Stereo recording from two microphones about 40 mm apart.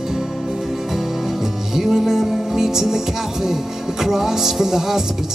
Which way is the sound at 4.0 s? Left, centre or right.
Centre.